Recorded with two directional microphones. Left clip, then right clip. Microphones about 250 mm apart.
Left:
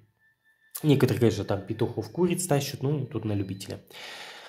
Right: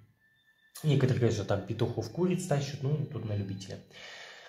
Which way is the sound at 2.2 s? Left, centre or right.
Left.